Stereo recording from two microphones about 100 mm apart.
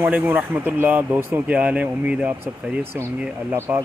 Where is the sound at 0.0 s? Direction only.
20° right (ahead or behind).